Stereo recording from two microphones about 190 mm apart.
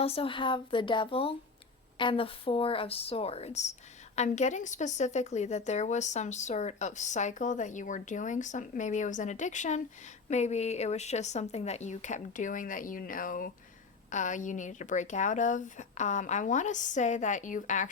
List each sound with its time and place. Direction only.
0.0 s a woman's voice: 30° left (ahead or behind)